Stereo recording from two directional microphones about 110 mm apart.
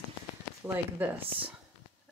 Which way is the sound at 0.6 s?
15° right (ahead or behind).